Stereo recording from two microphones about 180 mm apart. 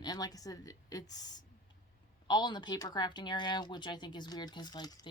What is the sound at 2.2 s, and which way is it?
Speech, 25° left (ahead or behind).